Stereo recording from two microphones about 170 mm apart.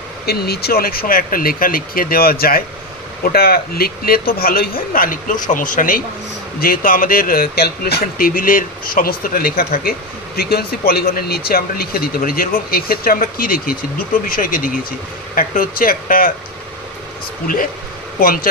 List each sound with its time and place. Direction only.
0.3 s speech: 65° left (ahead or behind)
18.2 s speech: 55° left (ahead or behind)